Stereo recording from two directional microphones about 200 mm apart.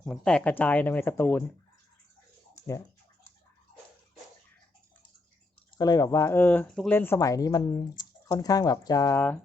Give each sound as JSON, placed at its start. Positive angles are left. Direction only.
{"t": 0.0, "sound": "speech", "side_deg": 5}
{"t": 2.6, "sound": "speech", "side_deg": 15}
{"t": 5.7, "sound": "speech", "side_deg": 20}